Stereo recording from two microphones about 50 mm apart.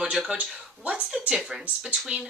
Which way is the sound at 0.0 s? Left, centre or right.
Centre.